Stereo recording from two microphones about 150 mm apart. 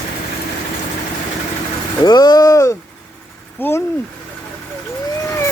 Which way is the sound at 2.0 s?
30° left (ahead or behind).